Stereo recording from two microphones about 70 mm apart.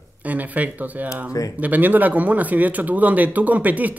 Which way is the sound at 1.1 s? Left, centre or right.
Left.